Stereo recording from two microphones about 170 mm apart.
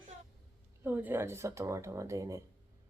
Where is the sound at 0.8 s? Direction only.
10° right (ahead or behind).